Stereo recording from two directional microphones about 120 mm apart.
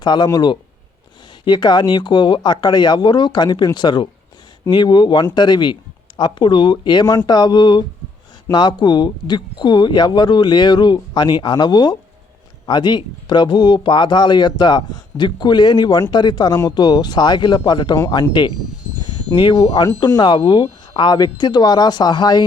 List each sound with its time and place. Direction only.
0.0 s speech: 35° left (ahead or behind)